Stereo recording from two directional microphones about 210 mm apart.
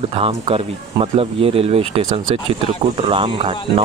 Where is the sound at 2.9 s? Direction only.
25° right (ahead or behind).